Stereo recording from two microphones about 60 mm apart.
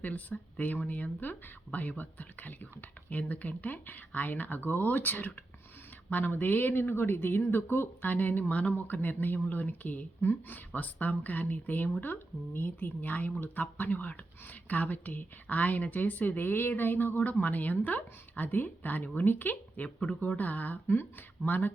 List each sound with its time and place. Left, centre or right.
0.0 s speech: left